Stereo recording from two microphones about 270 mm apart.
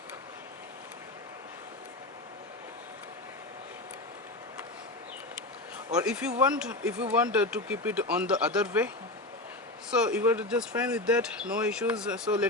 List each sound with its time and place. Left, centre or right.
5.9 s speech: centre
9.9 s speech: centre